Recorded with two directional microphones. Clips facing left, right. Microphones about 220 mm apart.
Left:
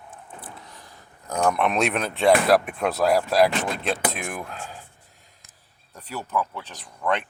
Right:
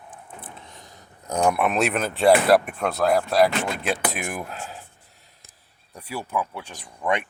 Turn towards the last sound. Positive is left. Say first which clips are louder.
# right 1 dB
turn(degrees=-15)  # may be behind; listen again after turning